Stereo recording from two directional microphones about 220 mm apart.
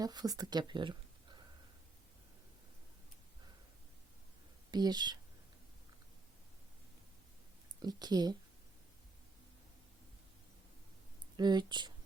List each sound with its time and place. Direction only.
0.0 s speech: 15° right (ahead or behind)
4.7 s speech: 20° right (ahead or behind)
7.8 s speech: 20° right (ahead or behind)
11.3 s speech: 20° right (ahead or behind)